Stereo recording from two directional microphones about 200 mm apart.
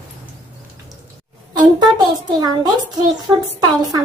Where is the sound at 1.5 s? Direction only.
20° right (ahead or behind).